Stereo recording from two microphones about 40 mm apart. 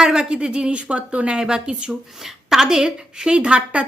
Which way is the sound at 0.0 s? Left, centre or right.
Centre.